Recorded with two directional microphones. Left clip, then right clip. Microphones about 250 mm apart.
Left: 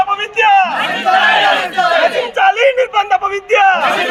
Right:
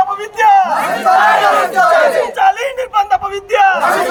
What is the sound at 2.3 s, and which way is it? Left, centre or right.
Speech, centre.